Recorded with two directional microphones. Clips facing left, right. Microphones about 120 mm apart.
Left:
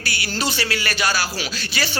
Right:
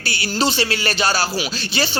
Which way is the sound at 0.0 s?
25° right (ahead or behind).